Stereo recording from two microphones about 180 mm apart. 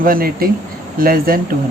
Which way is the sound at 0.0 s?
55° right (ahead or behind).